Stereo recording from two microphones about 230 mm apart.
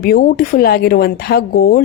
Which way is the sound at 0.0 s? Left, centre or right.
Left.